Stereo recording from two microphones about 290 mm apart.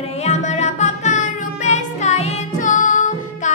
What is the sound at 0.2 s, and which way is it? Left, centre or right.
Music, left.